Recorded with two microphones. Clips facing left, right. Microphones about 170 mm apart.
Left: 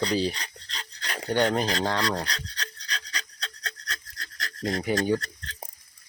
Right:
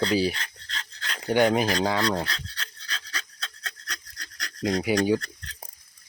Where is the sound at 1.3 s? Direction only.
10° right (ahead or behind).